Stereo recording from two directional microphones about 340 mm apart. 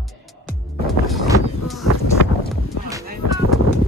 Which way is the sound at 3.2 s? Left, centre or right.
Left.